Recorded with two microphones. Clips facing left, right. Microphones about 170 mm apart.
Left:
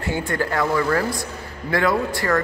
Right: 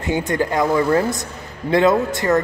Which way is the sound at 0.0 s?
20° right (ahead or behind).